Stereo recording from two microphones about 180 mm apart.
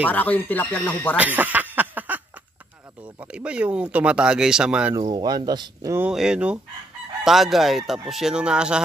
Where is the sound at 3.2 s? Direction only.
5° right (ahead or behind).